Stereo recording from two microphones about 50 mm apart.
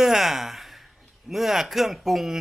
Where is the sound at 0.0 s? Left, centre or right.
Centre.